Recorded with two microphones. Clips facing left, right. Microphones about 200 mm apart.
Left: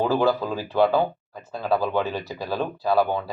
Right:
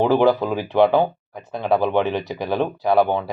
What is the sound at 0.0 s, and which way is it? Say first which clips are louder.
Speech: right 5 dB; 20° right (ahead or behind).